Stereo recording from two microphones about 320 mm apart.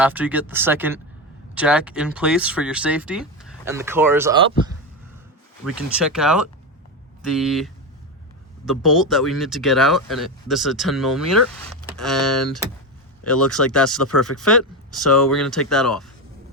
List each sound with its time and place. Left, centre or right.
0.0 s speech: centre